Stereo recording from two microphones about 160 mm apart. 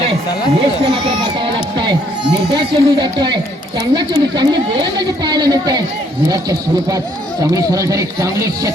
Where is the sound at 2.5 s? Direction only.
30° right (ahead or behind).